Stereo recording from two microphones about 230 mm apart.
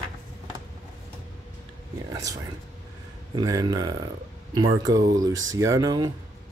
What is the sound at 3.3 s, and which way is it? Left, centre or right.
Speech, centre.